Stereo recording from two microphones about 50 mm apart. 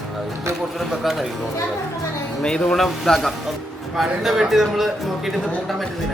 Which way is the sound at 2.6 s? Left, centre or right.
Centre.